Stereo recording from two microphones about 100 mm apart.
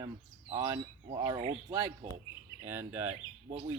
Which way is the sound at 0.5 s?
35° right (ahead or behind).